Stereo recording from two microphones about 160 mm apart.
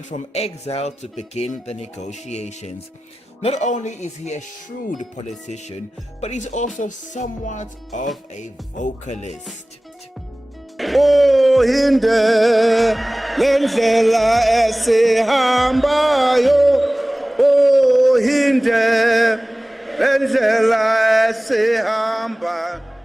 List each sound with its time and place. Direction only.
0.1 s speech: 40° left (ahead or behind)
10.8 s music: centre (ahead or behind)